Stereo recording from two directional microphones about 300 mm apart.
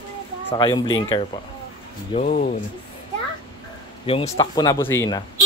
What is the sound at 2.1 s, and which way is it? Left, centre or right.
Speech, left.